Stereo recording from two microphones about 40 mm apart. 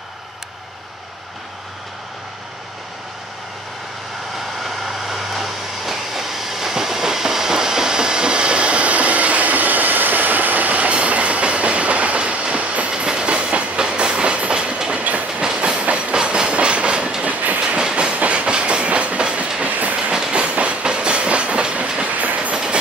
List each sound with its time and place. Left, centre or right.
4.6 s vehicle: centre; by 12.9 s right
12.9 s train: right
17.2 s train: right
17.6 s train: right
19.6 s train: right
20.0 s train: right
22.1 s train: right